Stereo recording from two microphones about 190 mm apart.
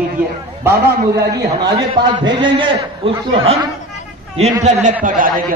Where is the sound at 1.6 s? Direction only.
20° right (ahead or behind).